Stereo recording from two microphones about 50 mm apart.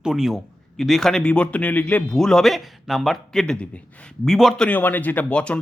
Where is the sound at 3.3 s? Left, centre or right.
Centre.